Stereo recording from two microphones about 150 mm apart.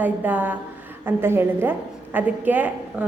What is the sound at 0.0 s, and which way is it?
A woman's voice, 10° right (ahead or behind).